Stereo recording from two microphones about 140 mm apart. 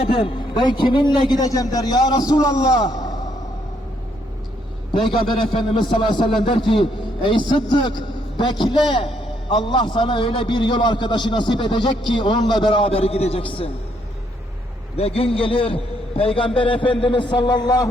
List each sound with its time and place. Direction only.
0.0 s a man's voice: 40° left (ahead or behind)
5.2 s a man's voice: 35° left (ahead or behind)
14.9 s a man's voice: 45° left (ahead or behind); by 17.8 s 30° left (ahead or behind)